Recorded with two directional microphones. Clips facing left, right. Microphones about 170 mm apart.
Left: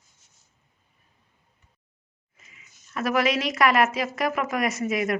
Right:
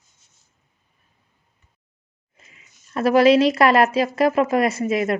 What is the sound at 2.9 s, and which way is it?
A woman's voice, 30° right (ahead or behind).